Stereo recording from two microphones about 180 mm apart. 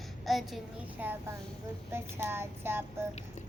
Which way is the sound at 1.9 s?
15° right (ahead or behind).